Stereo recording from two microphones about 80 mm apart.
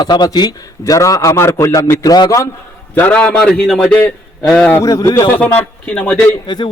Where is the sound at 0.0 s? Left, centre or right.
Left.